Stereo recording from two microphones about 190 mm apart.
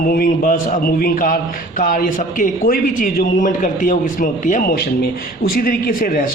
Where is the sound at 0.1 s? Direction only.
50° left (ahead or behind).